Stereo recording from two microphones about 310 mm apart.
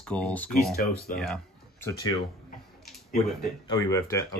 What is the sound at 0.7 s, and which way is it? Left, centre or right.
Speech, left.